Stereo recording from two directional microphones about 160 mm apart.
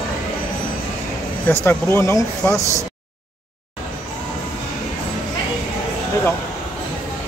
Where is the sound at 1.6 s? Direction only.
15° left (ahead or behind).